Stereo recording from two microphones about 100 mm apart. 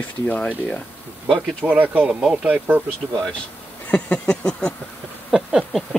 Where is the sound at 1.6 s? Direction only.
15° right (ahead or behind).